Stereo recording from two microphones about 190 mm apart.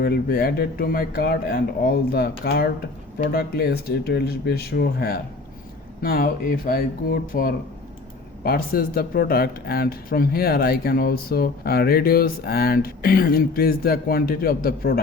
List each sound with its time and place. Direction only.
0.0 s speech: 50° left (ahead or behind)